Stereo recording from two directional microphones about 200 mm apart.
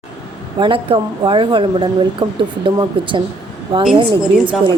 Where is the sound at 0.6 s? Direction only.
25° right (ahead or behind).